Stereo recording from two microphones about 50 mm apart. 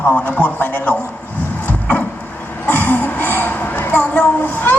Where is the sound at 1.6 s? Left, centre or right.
Left.